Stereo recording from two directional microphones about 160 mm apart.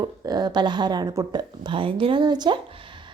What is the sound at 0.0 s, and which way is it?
A woman's voice, 25° right (ahead or behind).